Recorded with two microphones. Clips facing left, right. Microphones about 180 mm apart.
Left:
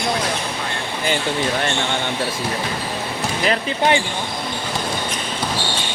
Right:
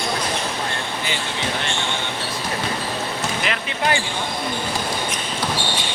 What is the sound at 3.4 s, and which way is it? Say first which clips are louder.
Speech: left 7 dB; 35° left (ahead or behind).